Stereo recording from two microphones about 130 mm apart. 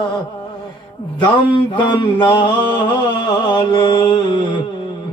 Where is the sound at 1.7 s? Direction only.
35° left (ahead or behind).